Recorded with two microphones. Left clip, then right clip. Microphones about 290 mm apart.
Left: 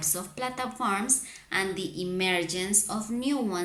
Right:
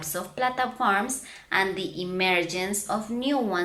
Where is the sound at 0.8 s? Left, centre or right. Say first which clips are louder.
Right 2 dB; centre.